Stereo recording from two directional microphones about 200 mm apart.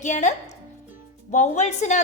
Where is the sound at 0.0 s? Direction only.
35° left (ahead or behind).